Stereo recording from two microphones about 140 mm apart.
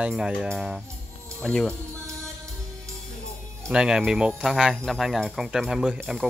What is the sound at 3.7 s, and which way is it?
Speech, 5° right (ahead or behind).